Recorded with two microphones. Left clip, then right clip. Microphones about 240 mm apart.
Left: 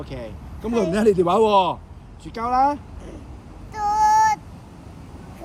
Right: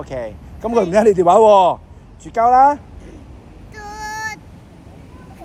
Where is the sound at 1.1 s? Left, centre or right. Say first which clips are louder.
Right 9 dB; right.